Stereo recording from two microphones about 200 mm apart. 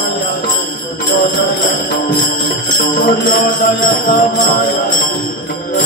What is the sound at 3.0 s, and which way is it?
Music, 45° left (ahead or behind).